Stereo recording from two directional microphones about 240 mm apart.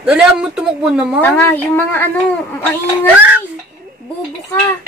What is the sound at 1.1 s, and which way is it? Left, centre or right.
Speech, centre.